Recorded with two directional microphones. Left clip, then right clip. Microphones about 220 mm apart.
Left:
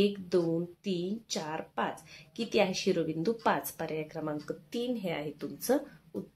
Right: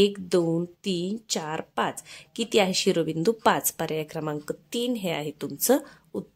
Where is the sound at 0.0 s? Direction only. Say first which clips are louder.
Right 6 dB; 45° right (ahead or behind).